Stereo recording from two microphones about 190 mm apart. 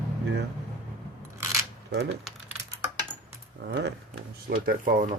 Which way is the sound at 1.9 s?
65° right (ahead or behind).